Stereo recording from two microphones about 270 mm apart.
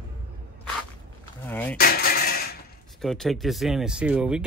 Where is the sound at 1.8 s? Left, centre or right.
Left.